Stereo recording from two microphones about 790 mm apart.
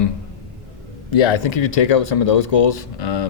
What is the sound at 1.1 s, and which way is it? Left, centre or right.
Speech, left.